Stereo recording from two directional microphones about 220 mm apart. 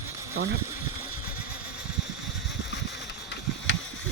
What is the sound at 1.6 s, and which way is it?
Engine, 5° right (ahead or behind).